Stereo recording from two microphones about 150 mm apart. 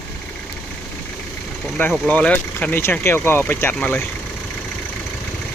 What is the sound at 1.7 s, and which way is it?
Speech, 5° left (ahead or behind).